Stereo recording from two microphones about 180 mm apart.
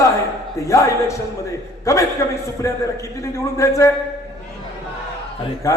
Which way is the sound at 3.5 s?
15° left (ahead or behind).